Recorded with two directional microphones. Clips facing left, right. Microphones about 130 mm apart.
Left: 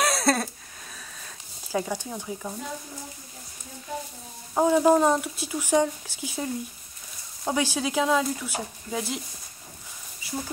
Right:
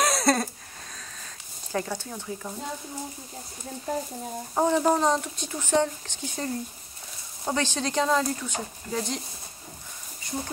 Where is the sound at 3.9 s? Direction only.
40° right (ahead or behind).